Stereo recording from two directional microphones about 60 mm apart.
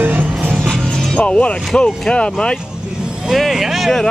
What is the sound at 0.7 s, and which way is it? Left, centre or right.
Music, centre.